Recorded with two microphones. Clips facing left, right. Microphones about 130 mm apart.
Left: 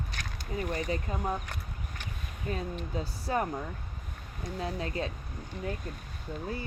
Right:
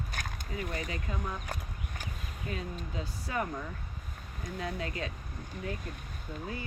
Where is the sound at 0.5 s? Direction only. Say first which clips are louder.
Left 5 dB; 35° left (ahead or behind).